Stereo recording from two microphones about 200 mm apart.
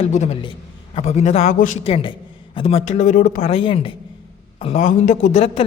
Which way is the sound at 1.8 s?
25° left (ahead or behind).